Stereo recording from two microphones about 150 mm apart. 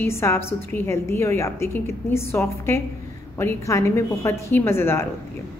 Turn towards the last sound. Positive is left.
turn(degrees=15)  # may be behind; listen again after turning